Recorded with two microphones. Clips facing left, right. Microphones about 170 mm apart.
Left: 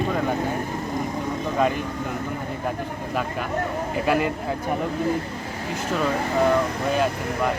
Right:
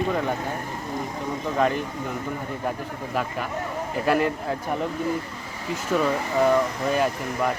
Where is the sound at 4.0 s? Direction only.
Centre (ahead or behind).